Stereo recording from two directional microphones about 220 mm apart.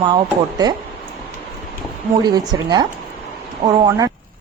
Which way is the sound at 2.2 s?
20° right (ahead or behind).